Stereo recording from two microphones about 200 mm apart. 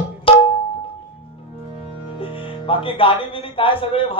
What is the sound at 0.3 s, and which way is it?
Music, 25° left (ahead or behind).